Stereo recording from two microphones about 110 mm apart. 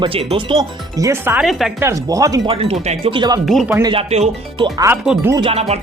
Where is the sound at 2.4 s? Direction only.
60° right (ahead or behind).